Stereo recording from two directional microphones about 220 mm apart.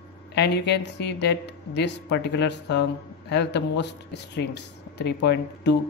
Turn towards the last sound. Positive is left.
turn(degrees=50)  # may be behind; listen again after turning